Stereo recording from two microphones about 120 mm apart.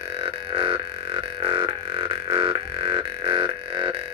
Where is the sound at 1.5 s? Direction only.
50° right (ahead or behind).